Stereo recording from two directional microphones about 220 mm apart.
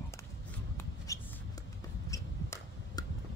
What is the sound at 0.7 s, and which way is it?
Shuffle, 15° left (ahead or behind).